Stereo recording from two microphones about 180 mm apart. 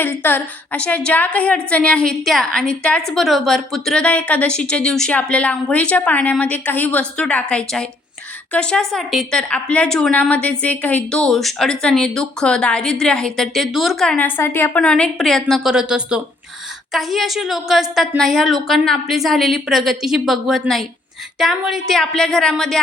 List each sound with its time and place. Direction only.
0.0 s a woman's voice: 10° left (ahead or behind)